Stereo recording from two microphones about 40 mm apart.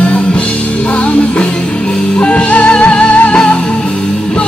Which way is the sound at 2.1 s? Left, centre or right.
Left.